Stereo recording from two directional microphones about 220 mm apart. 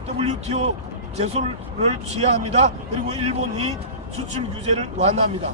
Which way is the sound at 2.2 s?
30° right (ahead or behind).